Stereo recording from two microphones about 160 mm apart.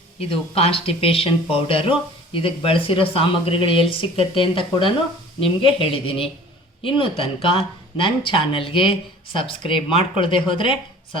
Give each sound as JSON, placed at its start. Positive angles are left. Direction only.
{"t": 0.2, "sound": "speech", "side_deg": 35}